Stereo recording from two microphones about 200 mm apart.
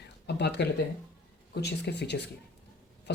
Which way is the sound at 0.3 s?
55° left (ahead or behind).